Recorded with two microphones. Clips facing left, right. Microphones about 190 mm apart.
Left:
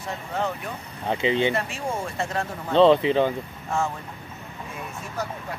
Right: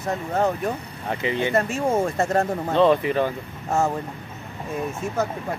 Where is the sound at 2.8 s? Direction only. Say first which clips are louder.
Left 2 dB; 20° left (ahead or behind).